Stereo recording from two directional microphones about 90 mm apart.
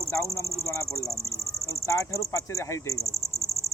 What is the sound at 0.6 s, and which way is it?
Cricket, 35° left (ahead or behind).